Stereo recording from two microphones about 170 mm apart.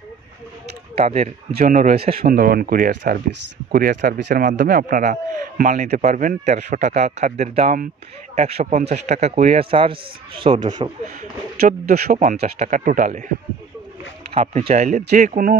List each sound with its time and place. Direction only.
0.9 s speech: 40° right (ahead or behind)
1.5 s a man's voice: 55° right (ahead or behind); by 2.1 s 40° right (ahead or behind)
2.2 s speech: 60° right (ahead or behind)
4.5 s a man's voice: 55° right (ahead or behind); by 10.9 s 25° right (ahead or behind)
11.6 s a man's voice: 55° right (ahead or behind)
14.3 s a man's voice: 40° right (ahead or behind)